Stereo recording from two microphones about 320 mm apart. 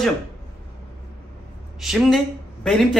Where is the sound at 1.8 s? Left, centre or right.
Centre.